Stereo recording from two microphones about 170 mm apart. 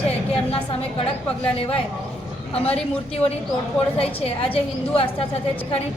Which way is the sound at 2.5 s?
35° left (ahead or behind).